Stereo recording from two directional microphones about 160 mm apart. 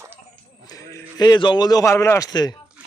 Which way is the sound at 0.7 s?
20° left (ahead or behind).